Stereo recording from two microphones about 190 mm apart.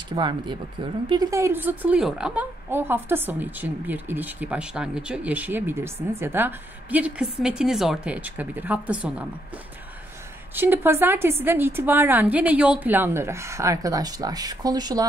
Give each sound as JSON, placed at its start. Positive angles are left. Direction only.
{"t": 0.1, "sound": "speech", "side_deg": -25}
{"t": 10.5, "sound": "speech", "side_deg": -10}